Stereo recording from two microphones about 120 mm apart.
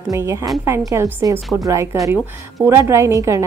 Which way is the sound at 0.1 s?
25° right (ahead or behind).